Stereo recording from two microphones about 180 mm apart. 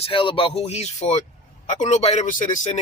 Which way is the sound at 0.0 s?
30° left (ahead or behind).